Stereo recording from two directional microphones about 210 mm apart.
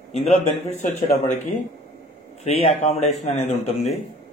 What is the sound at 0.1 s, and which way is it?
Speech, 30° left (ahead or behind).